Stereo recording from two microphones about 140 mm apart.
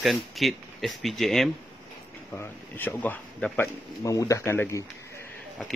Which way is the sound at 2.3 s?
15° left (ahead or behind).